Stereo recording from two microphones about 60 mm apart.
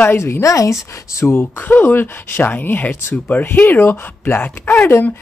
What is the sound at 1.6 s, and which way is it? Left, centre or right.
Speech, left.